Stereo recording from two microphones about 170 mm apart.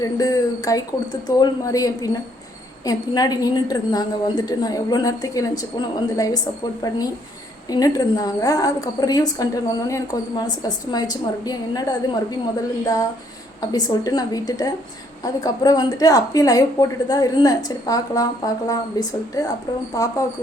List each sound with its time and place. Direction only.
0.0 s a woman's voice: 20° left (ahead or behind)